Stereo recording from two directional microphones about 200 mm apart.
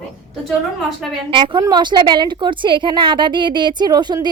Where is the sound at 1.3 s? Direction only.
25° right (ahead or behind).